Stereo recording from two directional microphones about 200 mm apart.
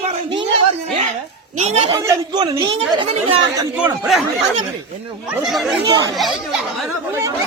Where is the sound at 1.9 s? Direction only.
15° right (ahead or behind).